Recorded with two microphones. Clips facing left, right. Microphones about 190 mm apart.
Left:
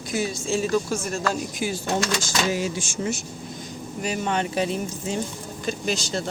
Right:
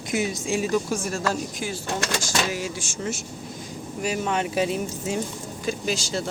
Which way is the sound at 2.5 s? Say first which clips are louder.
Left 4 dB; 20° left (ahead or behind).